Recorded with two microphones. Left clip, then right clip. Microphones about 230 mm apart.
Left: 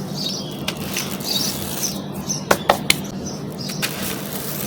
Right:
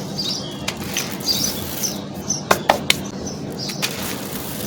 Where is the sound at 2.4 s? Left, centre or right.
Centre.